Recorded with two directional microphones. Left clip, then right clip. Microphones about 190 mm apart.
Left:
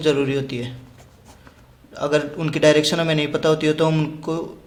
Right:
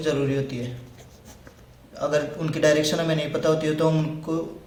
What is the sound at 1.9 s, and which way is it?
A man's voice, 35° left (ahead or behind).